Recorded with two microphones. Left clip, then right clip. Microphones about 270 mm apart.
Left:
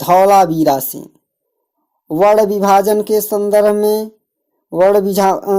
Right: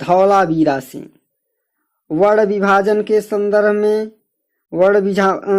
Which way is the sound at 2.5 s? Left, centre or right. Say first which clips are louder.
Left 2 dB; left.